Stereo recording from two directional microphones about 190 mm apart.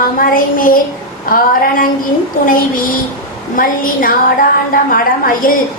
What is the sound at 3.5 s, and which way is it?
A woman's voice, 45° left (ahead or behind).